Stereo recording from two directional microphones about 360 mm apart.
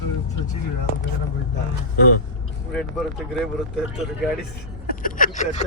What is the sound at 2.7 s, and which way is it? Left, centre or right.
Speech, centre.